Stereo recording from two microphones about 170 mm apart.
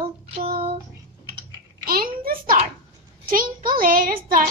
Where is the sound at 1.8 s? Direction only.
60° right (ahead or behind).